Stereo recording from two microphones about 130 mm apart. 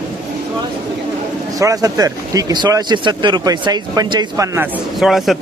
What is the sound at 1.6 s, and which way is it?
Speech, 25° right (ahead or behind).